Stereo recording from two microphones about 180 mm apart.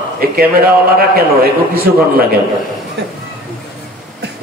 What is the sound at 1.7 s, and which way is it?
Speech, 60° right (ahead or behind).